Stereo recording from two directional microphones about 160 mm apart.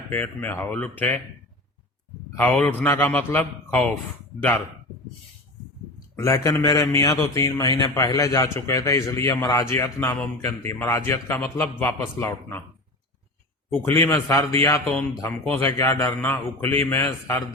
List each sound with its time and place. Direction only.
0.1 s a man's voice: 10° left (ahead or behind)
2.5 s a man's voice: 10° left (ahead or behind)
6.1 s a man's voice: 20° left (ahead or behind)
13.7 s a man's voice: 15° left (ahead or behind)